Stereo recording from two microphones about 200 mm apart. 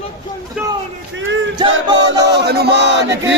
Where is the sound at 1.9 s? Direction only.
20° right (ahead or behind).